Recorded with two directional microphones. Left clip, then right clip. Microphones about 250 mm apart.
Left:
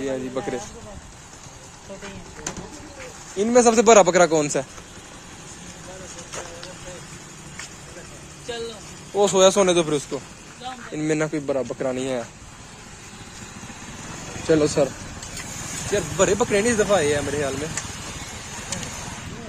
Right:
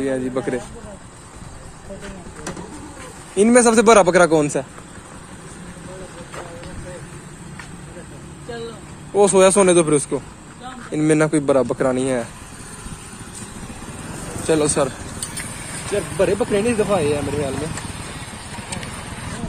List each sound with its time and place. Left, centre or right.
0.0 s a man's voice: centre
3.3 s a man's voice: centre
9.1 s a man's voice: centre
14.4 s speech: centre
16.2 s speech: centre